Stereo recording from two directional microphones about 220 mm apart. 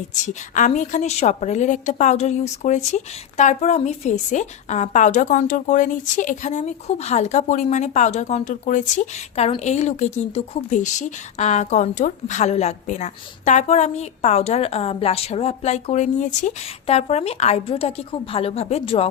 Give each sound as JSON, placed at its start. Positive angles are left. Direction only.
{"t": 0.5, "sound": "a woman's voice", "side_deg": 35}